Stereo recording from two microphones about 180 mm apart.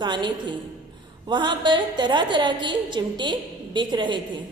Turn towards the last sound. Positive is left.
turn(degrees=-25)  # may be behind; listen again after turning